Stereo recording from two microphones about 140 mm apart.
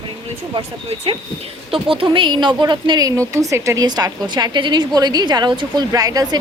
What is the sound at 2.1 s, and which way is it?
A woman's voice, 35° right (ahead or behind).